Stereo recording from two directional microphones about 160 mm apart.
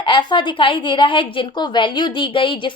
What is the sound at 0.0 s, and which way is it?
A woman's voice, 30° left (ahead or behind).